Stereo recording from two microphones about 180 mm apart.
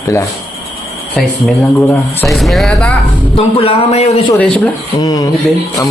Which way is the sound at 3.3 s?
30° left (ahead or behind).